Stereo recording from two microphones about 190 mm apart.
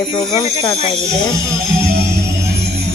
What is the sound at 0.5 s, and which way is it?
Speech, 25° left (ahead or behind).